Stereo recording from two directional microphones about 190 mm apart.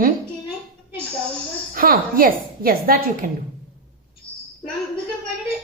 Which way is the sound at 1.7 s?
50° right (ahead or behind).